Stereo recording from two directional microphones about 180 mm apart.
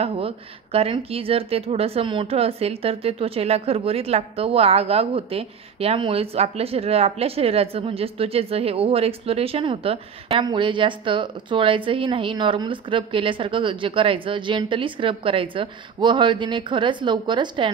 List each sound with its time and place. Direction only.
0.0 s a woman's voice: 35° right (ahead or behind)